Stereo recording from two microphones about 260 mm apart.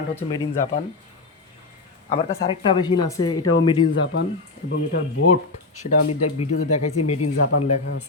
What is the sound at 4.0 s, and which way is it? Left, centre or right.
Speech, left.